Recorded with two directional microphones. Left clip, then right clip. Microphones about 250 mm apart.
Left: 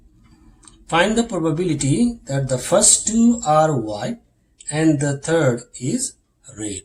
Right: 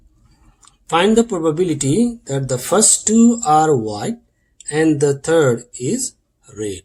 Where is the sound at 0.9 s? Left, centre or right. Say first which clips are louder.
Right 3 dB; right.